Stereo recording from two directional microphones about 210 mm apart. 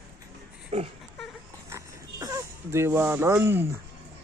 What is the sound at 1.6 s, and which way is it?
Dog, 15° right (ahead or behind).